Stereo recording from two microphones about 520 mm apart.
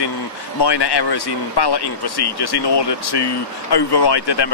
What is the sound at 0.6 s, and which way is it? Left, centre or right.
Speech, left.